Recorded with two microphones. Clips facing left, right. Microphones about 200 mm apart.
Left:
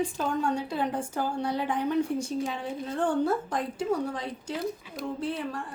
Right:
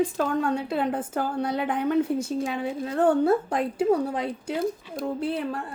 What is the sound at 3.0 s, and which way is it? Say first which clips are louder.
Speech: right 6 dB; 60° right (ahead or behind).